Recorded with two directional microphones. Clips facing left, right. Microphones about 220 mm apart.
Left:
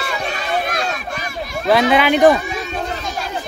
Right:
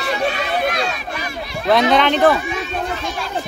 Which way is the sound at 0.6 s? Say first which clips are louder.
Right 2 dB; 45° left (ahead or behind).